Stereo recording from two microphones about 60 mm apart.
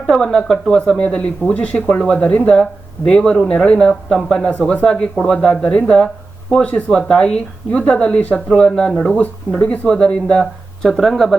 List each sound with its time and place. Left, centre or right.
0.1 s speech: centre
0.8 s speech: centre
8.9 s speech: centre
9.2 s speech: centre
10.8 s speech: centre